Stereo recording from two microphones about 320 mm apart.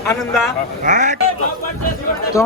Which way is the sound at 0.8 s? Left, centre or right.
Right.